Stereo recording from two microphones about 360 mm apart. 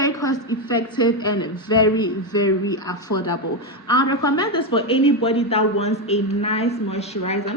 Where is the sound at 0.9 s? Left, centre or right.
Centre.